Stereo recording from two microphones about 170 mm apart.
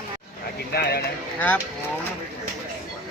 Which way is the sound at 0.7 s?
70° left (ahead or behind).